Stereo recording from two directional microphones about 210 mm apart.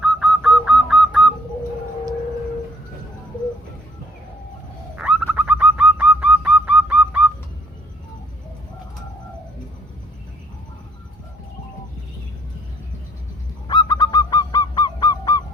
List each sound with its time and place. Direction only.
0.0 s fowl: centre (ahead or behind)
4.9 s bird: 5° right (ahead or behind)
13.7 s goose: 20° left (ahead or behind)